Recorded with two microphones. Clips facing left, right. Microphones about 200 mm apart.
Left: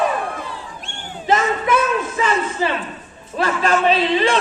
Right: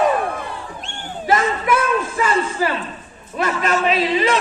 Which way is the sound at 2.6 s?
25° left (ahead or behind).